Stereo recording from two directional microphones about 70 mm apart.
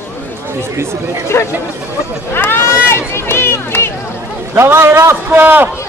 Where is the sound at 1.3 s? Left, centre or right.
Left.